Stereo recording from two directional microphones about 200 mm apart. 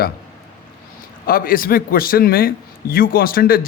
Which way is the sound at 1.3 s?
45° left (ahead or behind).